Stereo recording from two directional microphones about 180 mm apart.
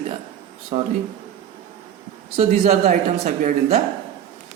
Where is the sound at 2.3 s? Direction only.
35° right (ahead or behind).